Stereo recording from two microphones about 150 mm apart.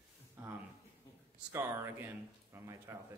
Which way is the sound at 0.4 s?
15° right (ahead or behind).